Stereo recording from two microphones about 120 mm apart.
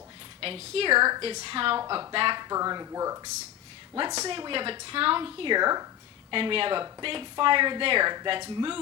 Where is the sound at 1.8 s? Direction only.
30° right (ahead or behind).